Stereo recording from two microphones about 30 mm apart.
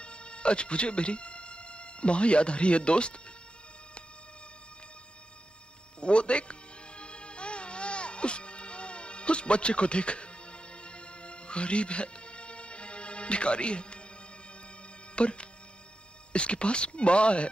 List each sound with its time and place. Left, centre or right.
0.0 s speech: left
5.9 s speech: left
7.0 s music: left
15.1 s speech: left